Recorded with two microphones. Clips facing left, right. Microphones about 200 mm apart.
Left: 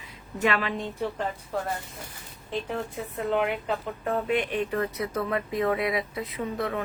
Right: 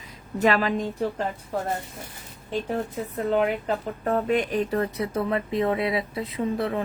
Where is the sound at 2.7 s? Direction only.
40° right (ahead or behind).